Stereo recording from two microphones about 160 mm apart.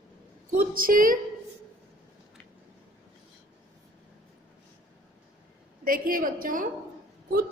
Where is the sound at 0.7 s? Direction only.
60° right (ahead or behind).